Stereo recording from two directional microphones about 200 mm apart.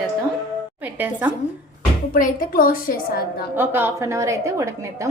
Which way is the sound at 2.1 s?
45° left (ahead or behind).